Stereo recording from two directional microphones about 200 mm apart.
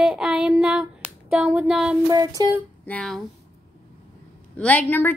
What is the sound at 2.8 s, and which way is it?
Child singing, 5° left (ahead or behind).